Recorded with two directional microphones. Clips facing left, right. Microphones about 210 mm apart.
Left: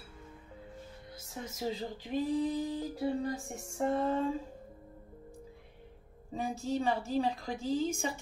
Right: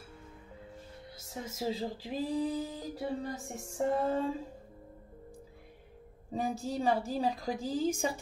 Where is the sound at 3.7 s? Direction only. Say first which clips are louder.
Right 1 dB; 35° right (ahead or behind).